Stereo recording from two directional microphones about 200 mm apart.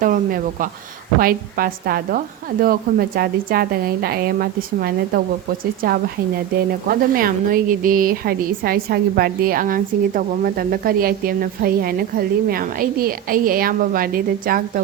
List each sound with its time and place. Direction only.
0.0 s a woman's voice: 45° right (ahead or behind)